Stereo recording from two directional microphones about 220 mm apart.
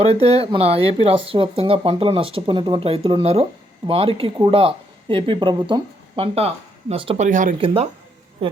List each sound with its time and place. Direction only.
0.0 s speech: 25° right (ahead or behind)